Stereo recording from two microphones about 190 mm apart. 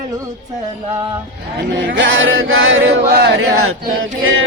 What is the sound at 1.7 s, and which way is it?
Male singing, 70° right (ahead or behind).